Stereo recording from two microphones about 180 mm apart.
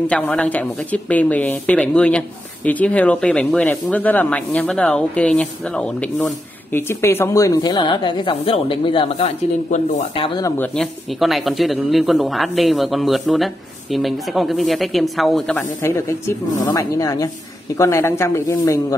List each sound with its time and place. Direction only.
0.1 s speech: 5° left (ahead or behind); by 9.3 s 30° left (ahead or behind)
9.7 s speech: 40° left (ahead or behind)
10.3 s speech: 15° left (ahead or behind)
10.7 s speech: centre (ahead or behind)
15.8 s speech: 15° left (ahead or behind)